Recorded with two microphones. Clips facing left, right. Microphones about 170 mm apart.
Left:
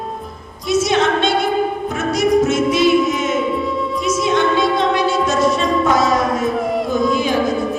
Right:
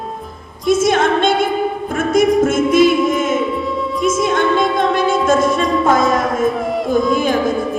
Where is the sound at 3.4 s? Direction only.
Centre (ahead or behind).